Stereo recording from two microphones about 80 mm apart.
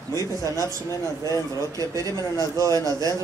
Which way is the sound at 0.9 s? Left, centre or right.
Left.